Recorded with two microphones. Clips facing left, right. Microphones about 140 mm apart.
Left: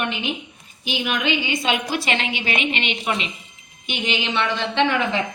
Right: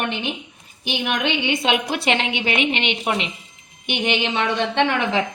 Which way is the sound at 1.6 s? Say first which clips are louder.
Right 2 dB; 60° right (ahead or behind).